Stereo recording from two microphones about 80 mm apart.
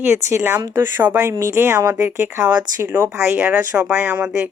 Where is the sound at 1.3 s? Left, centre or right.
Right.